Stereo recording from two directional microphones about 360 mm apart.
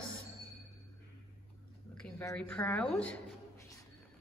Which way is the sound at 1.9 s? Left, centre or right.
Centre.